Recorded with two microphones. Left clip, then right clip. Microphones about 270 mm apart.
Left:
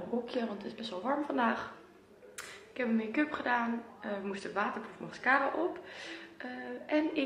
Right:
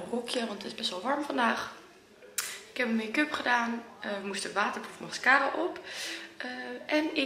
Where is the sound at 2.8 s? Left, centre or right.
Centre.